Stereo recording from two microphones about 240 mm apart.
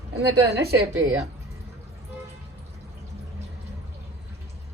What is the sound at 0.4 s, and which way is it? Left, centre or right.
Speech, right.